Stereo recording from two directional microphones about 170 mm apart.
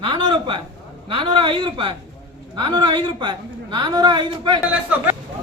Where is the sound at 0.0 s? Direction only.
30° right (ahead or behind).